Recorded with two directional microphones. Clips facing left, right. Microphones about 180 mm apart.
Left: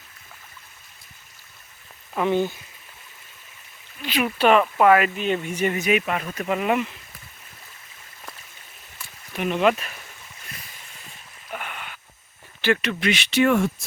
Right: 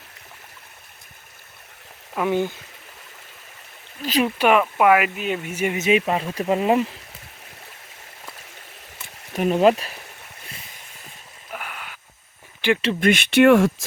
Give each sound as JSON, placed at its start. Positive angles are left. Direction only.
{"t": 2.1, "sound": "speech", "side_deg": -10}
{"t": 4.0, "sound": "speech", "side_deg": -40}
{"t": 4.4, "sound": "speech", "side_deg": -10}
{"t": 5.7, "sound": "speech", "side_deg": -25}
{"t": 9.3, "sound": "speech", "side_deg": -40}
{"t": 11.5, "sound": "a sound", "side_deg": -5}
{"t": 12.6, "sound": "speech", "side_deg": -15}
{"t": 13.0, "sound": "speech", "side_deg": -50}